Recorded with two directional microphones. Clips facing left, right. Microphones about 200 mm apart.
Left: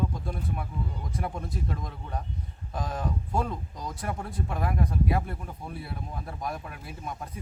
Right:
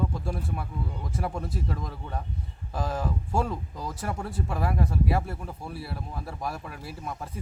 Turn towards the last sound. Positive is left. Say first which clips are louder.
# right 1 dB
turn(degrees=0)  # may be behind; listen again after turning